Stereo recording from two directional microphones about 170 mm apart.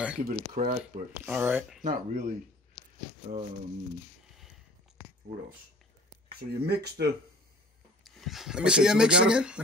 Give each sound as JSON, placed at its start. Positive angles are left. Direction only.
{"t": 0.2, "sound": "speech", "side_deg": -55}
{"t": 1.1, "sound": "speech", "side_deg": -10}
{"t": 1.8, "sound": "speech", "side_deg": -50}
{"t": 6.5, "sound": "speech", "side_deg": -70}
{"t": 8.0, "sound": "speech", "side_deg": 0}